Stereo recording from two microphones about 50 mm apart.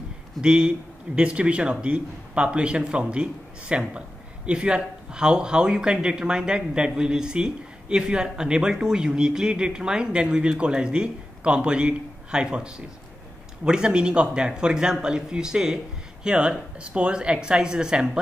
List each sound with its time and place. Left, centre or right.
0.4 s a man's voice: centre